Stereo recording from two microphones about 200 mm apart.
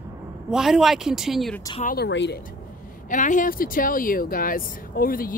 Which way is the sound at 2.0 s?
60° left (ahead or behind).